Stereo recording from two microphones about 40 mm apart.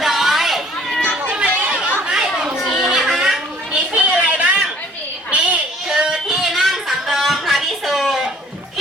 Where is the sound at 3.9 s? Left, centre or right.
Right.